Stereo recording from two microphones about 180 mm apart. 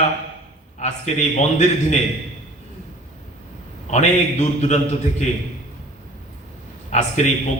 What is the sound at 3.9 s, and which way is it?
Speech, 40° left (ahead or behind).